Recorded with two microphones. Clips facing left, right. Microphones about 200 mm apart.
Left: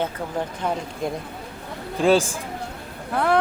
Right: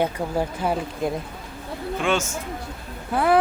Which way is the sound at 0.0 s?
10° right (ahead or behind).